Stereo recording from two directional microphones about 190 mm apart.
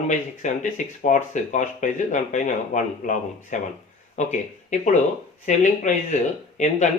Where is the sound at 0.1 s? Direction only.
40° left (ahead or behind).